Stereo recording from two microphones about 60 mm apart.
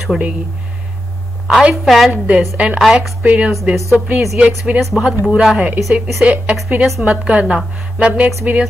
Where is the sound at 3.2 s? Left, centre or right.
Right.